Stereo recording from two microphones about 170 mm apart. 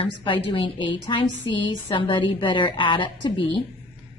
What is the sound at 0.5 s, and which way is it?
A woman's voice, 30° left (ahead or behind).